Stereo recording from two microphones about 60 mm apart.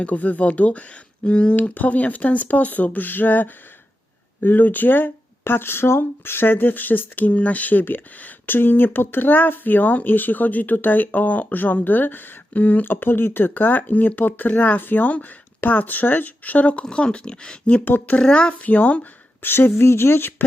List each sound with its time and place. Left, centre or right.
0.0 s speech: left
17.8 s speech: left
18.2 s speech: centre
19.5 s speech: left